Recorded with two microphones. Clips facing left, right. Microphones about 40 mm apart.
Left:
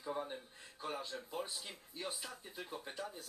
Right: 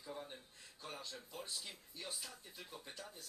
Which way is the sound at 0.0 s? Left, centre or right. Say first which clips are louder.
Left 8 dB; left.